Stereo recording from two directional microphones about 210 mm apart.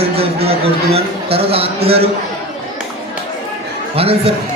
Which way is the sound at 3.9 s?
25° right (ahead or behind).